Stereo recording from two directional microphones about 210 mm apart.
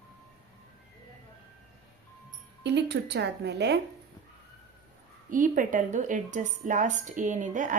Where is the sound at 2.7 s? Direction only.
55° right (ahead or behind).